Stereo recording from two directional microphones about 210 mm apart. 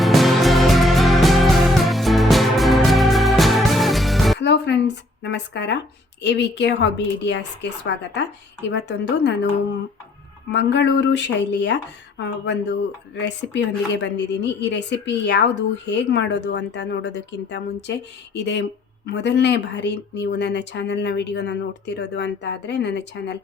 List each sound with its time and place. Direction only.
0.0 s music: centre (ahead or behind)
4.4 s music: 55° left (ahead or behind)
6.2 s a woman's voice: 55° left (ahead or behind)
10.5 s a woman's voice: 55° left (ahead or behind)